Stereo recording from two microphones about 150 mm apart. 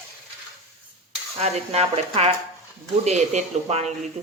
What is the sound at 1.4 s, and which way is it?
Speech, 45° right (ahead or behind).